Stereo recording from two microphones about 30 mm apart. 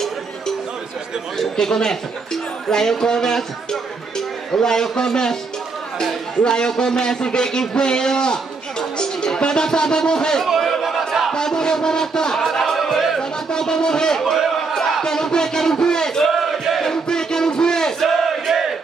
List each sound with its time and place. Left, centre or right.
1.6 s speech: centre
4.5 s a man's voice: centre
6.4 s speech: left
8.9 s music: left
9.4 s speech: left
10.8 s battle cry: centre
11.3 s speech: left
12.4 s music: centre
13.5 s speech: left
14.5 s crowd: centre
16.3 s battle cry: centre
16.8 s battle cry: left
18.0 s battle cry: centre